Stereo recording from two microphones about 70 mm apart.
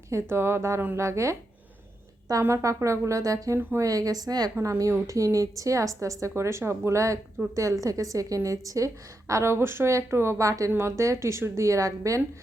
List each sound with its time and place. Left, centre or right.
0.1 s a woman's voice: right
2.4 s a woman's voice: right
4.8 s a woman's voice: right
10.7 s a woman's voice: right